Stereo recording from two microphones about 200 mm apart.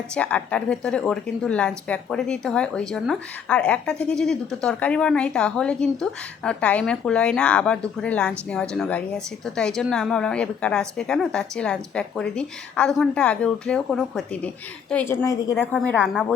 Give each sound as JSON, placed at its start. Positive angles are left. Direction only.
{"t": 0.1, "sound": "a woman's voice", "side_deg": 5}